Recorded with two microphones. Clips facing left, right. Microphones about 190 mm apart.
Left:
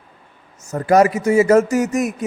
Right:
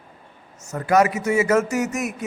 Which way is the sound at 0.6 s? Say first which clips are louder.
Left 4 dB; 35° left (ahead or behind).